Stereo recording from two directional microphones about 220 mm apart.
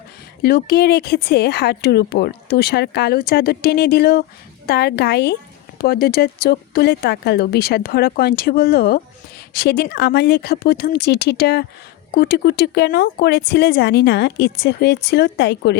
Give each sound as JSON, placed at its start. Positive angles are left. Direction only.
{"t": 0.4, "sound": "speech", "side_deg": 45}